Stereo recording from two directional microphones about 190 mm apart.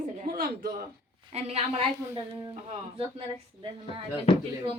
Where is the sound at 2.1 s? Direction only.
20° right (ahead or behind).